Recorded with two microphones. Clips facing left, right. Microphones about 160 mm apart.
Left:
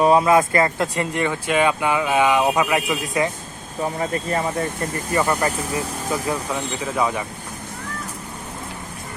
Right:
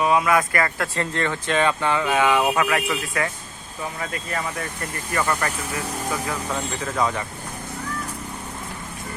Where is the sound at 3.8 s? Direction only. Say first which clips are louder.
Left 7 dB; 30° left (ahead or behind).